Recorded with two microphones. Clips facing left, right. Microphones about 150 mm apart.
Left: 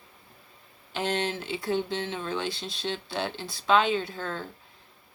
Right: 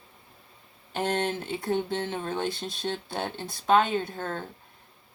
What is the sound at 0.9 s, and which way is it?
Speech, 50° right (ahead or behind).